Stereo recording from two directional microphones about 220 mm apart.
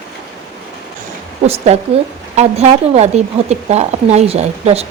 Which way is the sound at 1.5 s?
25° right (ahead or behind).